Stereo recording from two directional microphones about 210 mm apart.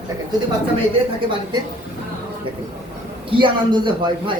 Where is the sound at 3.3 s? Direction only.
20° right (ahead or behind).